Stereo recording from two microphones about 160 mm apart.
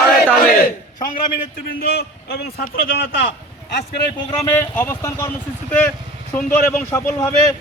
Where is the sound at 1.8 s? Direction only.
80° left.